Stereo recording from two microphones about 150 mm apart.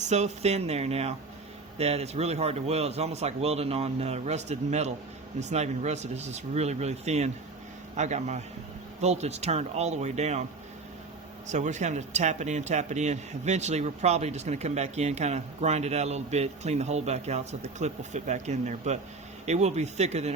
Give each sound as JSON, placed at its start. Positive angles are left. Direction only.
{"t": 0.0, "sound": "speech", "side_deg": -50}
{"t": 11.4, "sound": "speech", "side_deg": -55}